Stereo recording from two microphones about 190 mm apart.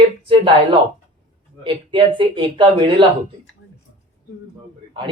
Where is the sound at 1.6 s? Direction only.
25° right (ahead or behind).